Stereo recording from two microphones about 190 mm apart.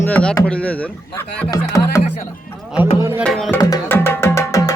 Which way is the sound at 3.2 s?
5° left (ahead or behind).